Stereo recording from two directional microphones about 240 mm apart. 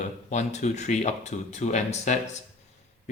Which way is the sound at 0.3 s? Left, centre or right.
Left.